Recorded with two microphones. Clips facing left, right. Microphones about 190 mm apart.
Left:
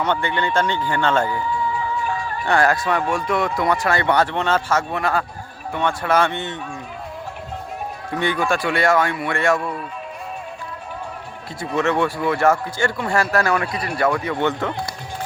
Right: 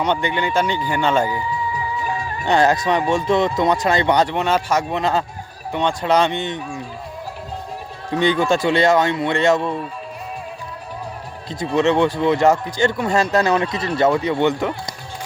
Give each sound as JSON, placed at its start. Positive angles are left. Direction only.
{"t": 0.0, "sound": "speech", "side_deg": -15}
{"t": 8.1, "sound": "speech", "side_deg": -20}
{"t": 11.4, "sound": "speech", "side_deg": -20}